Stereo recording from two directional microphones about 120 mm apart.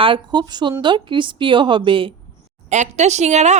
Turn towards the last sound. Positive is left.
turn(degrees=-70)  # may be behind; listen again after turning